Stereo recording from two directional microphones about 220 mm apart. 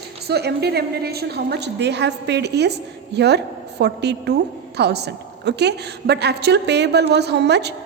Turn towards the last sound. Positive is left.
turn(degrees=-50)  # may be behind; listen again after turning